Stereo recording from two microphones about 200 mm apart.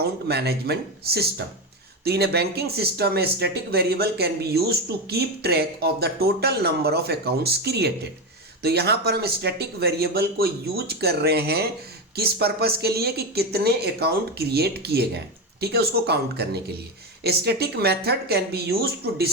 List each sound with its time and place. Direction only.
0.0 s speech: 55° right (ahead or behind)